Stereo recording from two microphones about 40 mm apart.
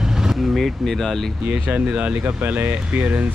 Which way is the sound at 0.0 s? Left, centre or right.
Centre.